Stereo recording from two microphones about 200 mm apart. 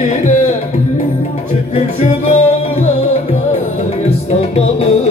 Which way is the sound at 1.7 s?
35° left (ahead or behind).